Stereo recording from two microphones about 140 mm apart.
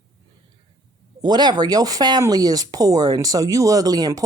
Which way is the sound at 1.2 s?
30° right (ahead or behind).